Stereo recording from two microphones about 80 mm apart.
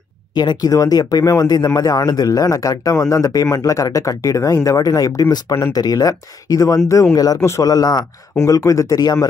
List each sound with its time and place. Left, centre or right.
0.3 s speech: left
0.7 s speech: left